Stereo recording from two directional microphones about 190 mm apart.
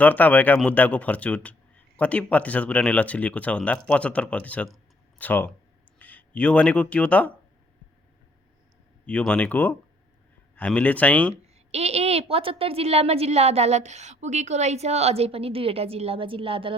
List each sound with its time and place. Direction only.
0.0 s a man's voice: 10° left (ahead or behind)
9.0 s a man's voice: 5° left (ahead or behind)
11.5 s a woman's voice: 35° right (ahead or behind)